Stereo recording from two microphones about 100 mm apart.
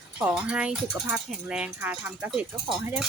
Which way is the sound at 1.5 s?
15° right (ahead or behind).